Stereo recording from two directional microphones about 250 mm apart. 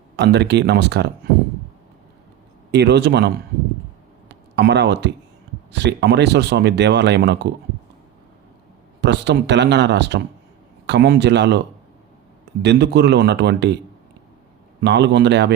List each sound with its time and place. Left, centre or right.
0.2 s speech: right
2.7 s speech: right
9.0 s speech: right
14.8 s speech: right